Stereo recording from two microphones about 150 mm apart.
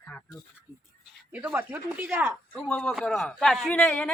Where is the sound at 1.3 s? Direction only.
10° right (ahead or behind).